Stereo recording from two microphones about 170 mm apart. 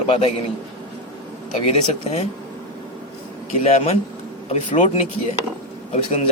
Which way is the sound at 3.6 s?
40° left (ahead or behind).